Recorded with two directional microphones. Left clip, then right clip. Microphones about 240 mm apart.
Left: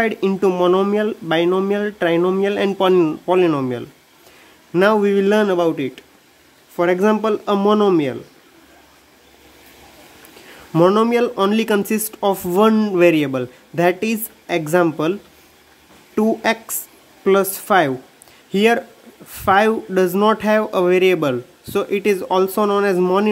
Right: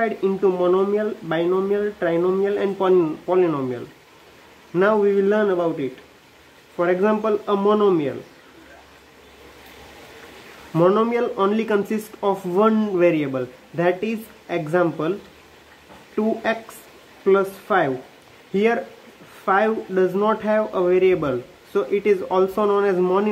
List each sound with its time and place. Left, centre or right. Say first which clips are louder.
0.0 s speech: left 2 dB; left
10.7 s speech: left 3 dB; left
16.2 s speech: left 4 dB; left